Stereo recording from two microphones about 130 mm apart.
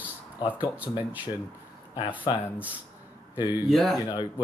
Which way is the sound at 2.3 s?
35° left (ahead or behind).